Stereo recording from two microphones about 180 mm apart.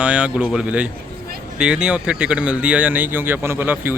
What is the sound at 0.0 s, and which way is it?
Speech, 5° right (ahead or behind).